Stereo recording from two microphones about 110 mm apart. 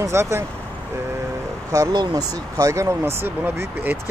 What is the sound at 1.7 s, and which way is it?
Speech, 35° right (ahead or behind).